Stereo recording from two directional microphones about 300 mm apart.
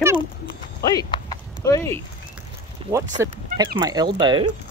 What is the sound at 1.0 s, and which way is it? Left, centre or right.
Clip-clop, centre.